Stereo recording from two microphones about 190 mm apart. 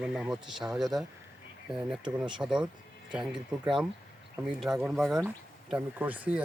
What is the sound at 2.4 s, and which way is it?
Speech, 5° right (ahead or behind).